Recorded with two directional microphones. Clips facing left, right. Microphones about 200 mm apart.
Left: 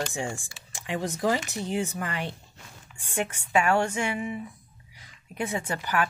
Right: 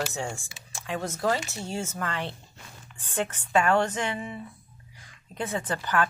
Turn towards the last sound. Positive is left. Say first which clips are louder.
# right 1 dB
turn(degrees=10)  # may be behind; listen again after turning